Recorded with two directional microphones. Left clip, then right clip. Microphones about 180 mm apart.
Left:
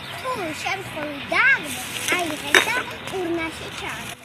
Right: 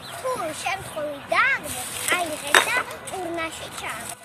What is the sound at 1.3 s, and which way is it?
A child's voice, 15° right (ahead or behind).